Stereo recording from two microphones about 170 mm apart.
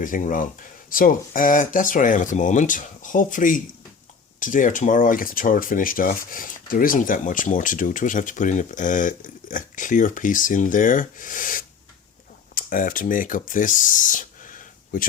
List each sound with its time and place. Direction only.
0.0 s speech: 50° left (ahead or behind)